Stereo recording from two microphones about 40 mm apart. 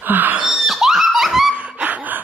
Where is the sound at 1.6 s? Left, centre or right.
Right.